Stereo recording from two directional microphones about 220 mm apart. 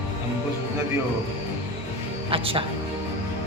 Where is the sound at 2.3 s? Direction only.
25° right (ahead or behind).